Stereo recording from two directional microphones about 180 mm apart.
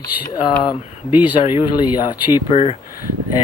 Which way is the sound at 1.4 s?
25° left (ahead or behind).